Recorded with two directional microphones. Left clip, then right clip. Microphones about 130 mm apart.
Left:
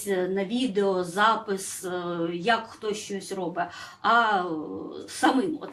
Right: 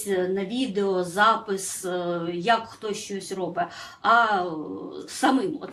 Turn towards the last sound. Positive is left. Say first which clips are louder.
# right 1 dB
turn(degrees=-35)  # may be behind; listen again after turning